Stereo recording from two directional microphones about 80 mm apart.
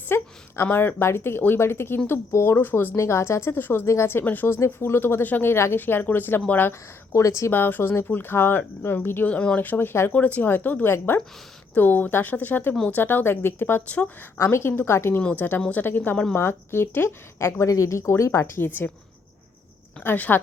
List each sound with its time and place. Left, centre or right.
0.1 s a woman's voice: left
7.2 s speech: left
7.5 s speech: left
10.1 s speech: centre
15.2 s speech: centre
15.7 s speech: left
20.0 s speech: centre